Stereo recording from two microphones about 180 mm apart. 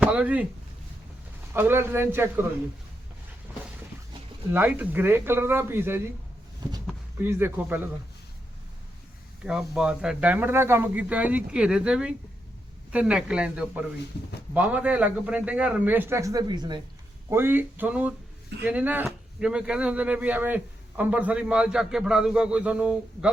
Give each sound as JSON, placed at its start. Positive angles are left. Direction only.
{"t": 0.0, "sound": "speech", "side_deg": -10}
{"t": 1.5, "sound": "speech", "side_deg": -10}
{"t": 4.5, "sound": "speech", "side_deg": -10}
{"t": 6.6, "sound": "a sound", "side_deg": -25}
{"t": 7.2, "sound": "speech", "side_deg": -15}
{"t": 9.4, "sound": "speech", "side_deg": -5}
{"t": 17.2, "sound": "speech", "side_deg": -10}